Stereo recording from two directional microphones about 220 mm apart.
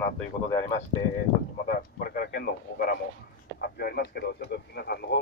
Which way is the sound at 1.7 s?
45° left (ahead or behind).